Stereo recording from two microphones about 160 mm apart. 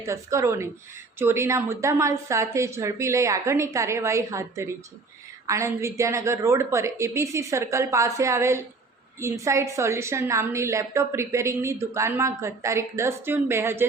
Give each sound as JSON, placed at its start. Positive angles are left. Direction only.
{"t": 0.0, "sound": "a woman's voice", "side_deg": -20}